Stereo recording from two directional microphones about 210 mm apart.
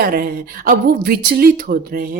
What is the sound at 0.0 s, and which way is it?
A woman's voice, 45° right (ahead or behind).